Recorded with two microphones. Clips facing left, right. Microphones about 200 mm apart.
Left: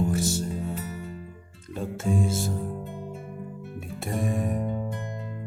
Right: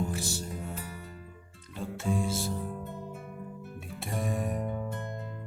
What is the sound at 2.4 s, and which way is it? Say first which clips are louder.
Music: left 4 dB; 20° left (ahead or behind).